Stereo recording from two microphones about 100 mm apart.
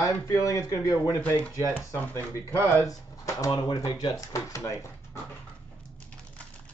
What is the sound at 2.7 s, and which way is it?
Speech, 30° left (ahead or behind).